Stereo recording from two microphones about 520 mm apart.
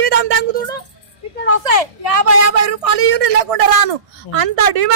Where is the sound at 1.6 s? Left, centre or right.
Right.